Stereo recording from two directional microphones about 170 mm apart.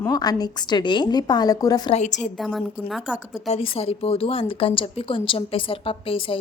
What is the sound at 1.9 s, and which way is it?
Speech, 45° left (ahead or behind).